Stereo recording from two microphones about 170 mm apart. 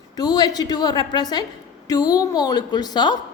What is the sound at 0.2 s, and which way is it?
A woman's voice, 25° left (ahead or behind).